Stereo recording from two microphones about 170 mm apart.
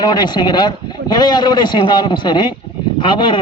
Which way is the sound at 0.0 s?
25° left (ahead or behind).